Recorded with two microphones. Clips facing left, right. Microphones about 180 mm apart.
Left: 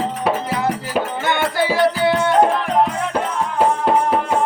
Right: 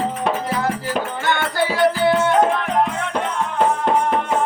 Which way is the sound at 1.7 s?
Centre (ahead or behind).